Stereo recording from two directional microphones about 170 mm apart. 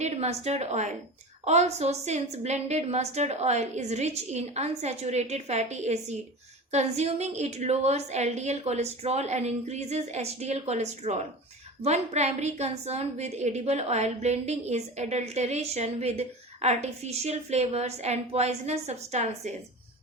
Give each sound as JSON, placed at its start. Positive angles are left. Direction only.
{"t": 0.0, "sound": "a woman's voice", "side_deg": -40}